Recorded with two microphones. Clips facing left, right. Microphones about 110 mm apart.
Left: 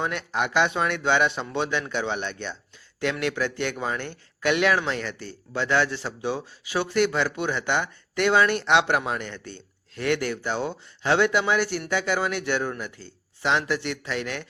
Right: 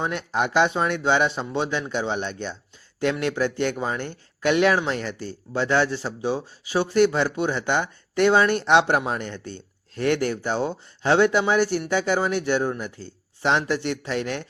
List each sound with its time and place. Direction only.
0.0 s speech: 30° right (ahead or behind)